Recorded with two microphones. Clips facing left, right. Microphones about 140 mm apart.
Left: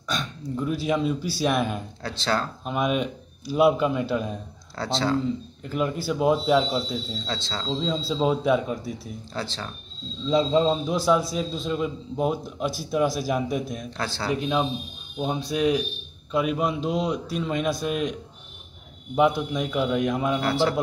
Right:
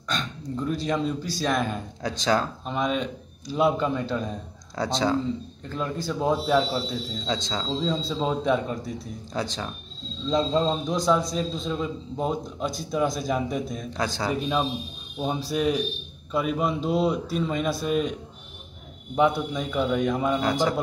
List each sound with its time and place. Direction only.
0.1 s a man's voice: 5° left (ahead or behind)
2.0 s speech: 15° right (ahead or behind)
2.6 s a man's voice: 10° left (ahead or behind)
4.7 s speech: 15° right (ahead or behind)
5.6 s a man's voice: 10° left (ahead or behind)
7.2 s speech: 15° right (ahead or behind)
7.6 s a man's voice: centre (ahead or behind)
8.1 s a man's voice: 10° left (ahead or behind)
9.3 s speech: 15° right (ahead or behind)
10.2 s a man's voice: 5° left (ahead or behind)
13.9 s speech: 15° right (ahead or behind)
14.2 s a man's voice: centre (ahead or behind)
19.1 s a man's voice: 5° left (ahead or behind)
20.4 s speech: 15° right (ahead or behind)